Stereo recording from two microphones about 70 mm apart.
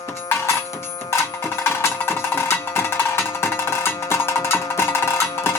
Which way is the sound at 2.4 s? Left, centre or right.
Left.